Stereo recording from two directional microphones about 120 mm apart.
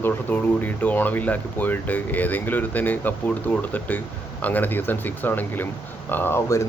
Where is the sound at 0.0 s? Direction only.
15° left (ahead or behind).